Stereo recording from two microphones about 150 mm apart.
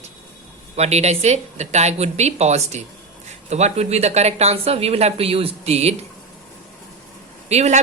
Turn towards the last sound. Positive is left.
turn(degrees=-45)  # may be behind; listen again after turning